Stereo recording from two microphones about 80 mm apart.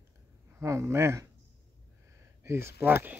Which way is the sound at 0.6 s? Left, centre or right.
Right.